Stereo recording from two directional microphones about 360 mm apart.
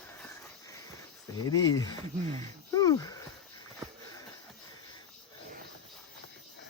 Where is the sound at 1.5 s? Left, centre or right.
Centre.